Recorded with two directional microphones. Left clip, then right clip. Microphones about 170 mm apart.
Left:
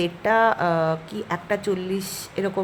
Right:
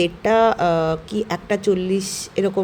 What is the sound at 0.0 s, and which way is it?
A woman's voice, 15° right (ahead or behind).